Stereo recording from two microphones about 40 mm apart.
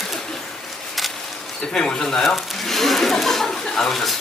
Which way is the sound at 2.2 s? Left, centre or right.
Centre.